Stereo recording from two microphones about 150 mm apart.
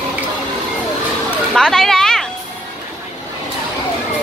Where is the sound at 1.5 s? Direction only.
5° left (ahead or behind).